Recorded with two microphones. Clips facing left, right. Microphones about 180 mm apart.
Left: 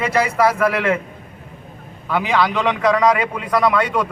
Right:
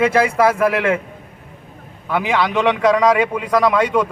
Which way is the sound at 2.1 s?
20° right (ahead or behind).